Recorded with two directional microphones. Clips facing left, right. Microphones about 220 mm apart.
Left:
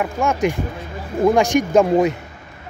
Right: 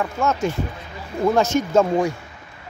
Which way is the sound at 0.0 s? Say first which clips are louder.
Left 3 dB; 15° left (ahead or behind).